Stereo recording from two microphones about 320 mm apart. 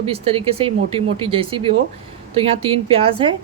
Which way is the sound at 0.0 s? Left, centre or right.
Centre.